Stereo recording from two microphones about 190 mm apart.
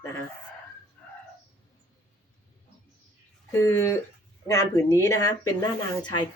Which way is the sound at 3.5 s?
15° left (ahead or behind).